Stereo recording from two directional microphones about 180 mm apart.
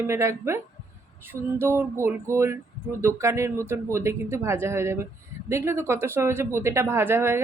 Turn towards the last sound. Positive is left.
turn(degrees=-15)  # may be behind; listen again after turning